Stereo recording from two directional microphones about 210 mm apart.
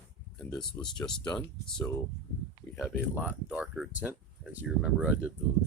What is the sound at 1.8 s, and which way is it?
Speech, 5° left (ahead or behind).